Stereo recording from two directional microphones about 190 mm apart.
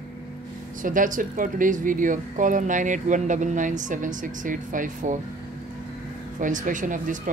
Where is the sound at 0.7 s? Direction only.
45° right (ahead or behind).